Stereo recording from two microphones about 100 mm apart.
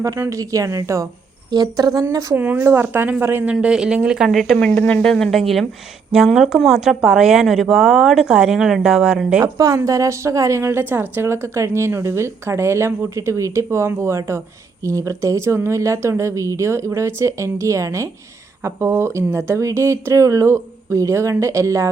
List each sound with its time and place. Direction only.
0.0 s speech: 30° right (ahead or behind)
2.3 s a woman's voice: 20° right (ahead or behind)
3.5 s speech: 10° right (ahead or behind)
4.3 s speech: centre (ahead or behind)
4.5 s a woman's voice: 10° left (ahead or behind); by 9.4 s 5° right (ahead or behind)
9.4 s a woman's voice: 35° right (ahead or behind)